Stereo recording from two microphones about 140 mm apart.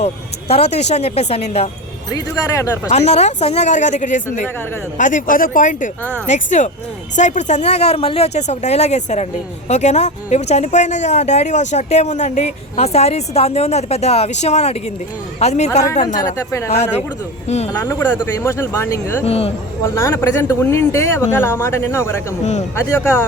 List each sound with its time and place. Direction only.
0.0 s speech: 50° left (ahead or behind)
2.1 s speech: 25° left (ahead or behind)
2.9 s speech: 50° left (ahead or behind); by 5.9 s 70° left (ahead or behind)
6.2 s speech: 55° left (ahead or behind)
16.4 s speech: 20° left (ahead or behind)
16.6 s speech: 50° left (ahead or behind)
17.7 s speech: 20° left (ahead or behind)
19.2 s speech: 45° left (ahead or behind)
19.8 s speech: 20° left (ahead or behind)